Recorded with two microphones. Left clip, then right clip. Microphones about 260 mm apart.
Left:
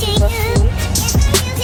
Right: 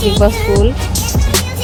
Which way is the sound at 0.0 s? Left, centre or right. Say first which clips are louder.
Right 5 dB; centre.